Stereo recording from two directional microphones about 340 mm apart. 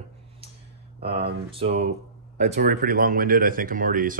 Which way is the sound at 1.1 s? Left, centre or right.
Right.